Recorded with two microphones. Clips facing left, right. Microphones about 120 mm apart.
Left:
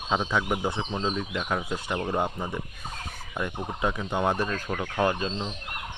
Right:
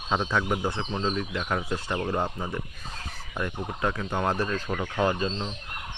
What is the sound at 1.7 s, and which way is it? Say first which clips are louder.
Speech: right 1 dB; 10° left (ahead or behind).